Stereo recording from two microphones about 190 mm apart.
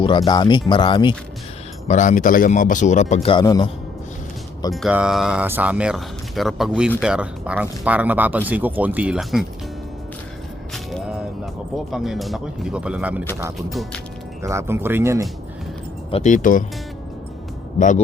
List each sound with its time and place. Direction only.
0.3 s speech: 20° left (ahead or behind)
1.9 s a man's voice: 40° left (ahead or behind)
3.2 s speech: 20° left (ahead or behind)
4.7 s speech: 5° right (ahead or behind)
10.9 s music: centre (ahead or behind)
11.9 s speech: centre (ahead or behind)
14.4 s speech: 15° right (ahead or behind)
16.1 s speech: 40° left (ahead or behind)
17.7 s a man's voice: 40° left (ahead or behind)